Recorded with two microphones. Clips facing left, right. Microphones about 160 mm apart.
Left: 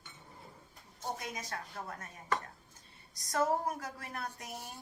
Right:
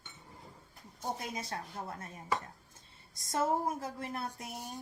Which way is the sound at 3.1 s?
25° right (ahead or behind).